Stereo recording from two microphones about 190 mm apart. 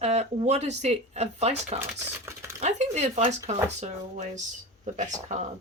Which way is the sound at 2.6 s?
35° right (ahead or behind).